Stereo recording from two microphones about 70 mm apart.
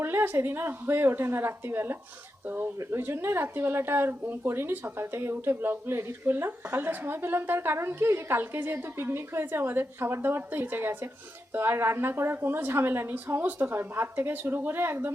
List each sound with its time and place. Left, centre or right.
0.0 s speech: right